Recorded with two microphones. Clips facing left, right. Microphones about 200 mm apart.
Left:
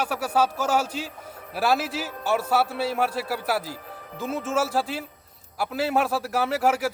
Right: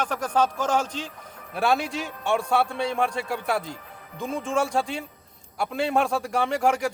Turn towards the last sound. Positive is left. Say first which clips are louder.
# even
turn(degrees=5)  # may be behind; listen again after turning